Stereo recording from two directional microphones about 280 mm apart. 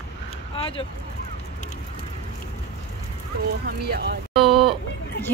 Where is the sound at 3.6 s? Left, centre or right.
Right.